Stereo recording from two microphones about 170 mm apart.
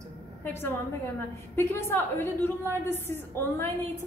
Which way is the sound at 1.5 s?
15° left (ahead or behind).